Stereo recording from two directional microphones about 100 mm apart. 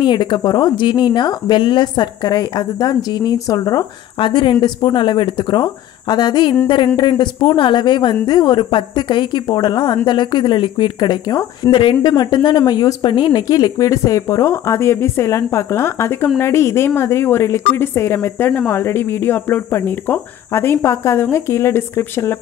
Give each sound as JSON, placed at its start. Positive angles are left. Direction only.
{"t": 0.0, "sound": "a woman's voice", "side_deg": 50}
{"t": 4.2, "sound": "a woman's voice", "side_deg": 55}
{"t": 11.7, "sound": "a woman's voice", "side_deg": 55}